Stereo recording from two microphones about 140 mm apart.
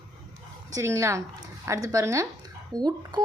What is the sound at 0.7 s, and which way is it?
A woman's voice, 20° right (ahead or behind).